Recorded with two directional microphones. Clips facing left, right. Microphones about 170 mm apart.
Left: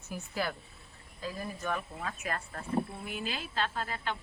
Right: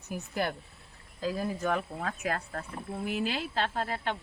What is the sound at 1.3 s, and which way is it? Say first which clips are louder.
Speech: right 5 dB; 65° right (ahead or behind).